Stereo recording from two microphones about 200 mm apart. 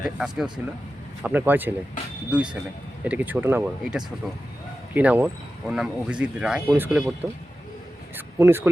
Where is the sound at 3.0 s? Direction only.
10° right (ahead or behind).